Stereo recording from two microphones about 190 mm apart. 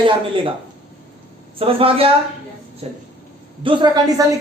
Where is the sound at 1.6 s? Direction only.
30° right (ahead or behind).